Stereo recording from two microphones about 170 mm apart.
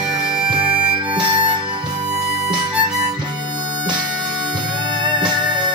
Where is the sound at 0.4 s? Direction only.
5° right (ahead or behind).